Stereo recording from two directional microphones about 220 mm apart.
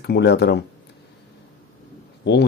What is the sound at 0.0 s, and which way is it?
Speech, 45° left (ahead or behind).